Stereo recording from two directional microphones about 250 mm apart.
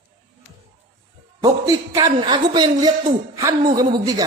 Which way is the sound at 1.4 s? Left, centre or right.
Centre.